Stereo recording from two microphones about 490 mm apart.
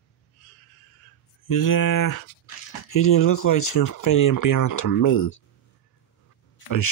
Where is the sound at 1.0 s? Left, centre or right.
Left.